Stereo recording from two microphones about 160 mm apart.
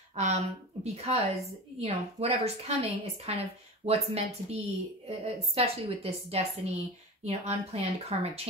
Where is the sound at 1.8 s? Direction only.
40° right (ahead or behind).